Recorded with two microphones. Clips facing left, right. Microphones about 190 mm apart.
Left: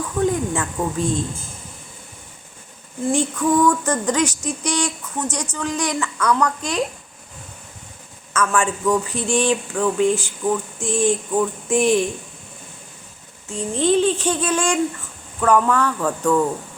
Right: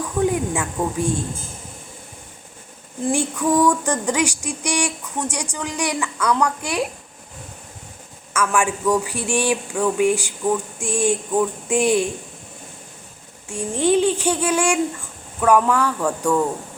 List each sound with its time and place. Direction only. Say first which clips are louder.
0.2 s speech: even; 10° right (ahead or behind)
3.1 s female singing: left 1 dB; 10° right (ahead or behind)
8.3 s female singing: even; 10° right (ahead or behind)
13.5 s female singing: even; 10° right (ahead or behind)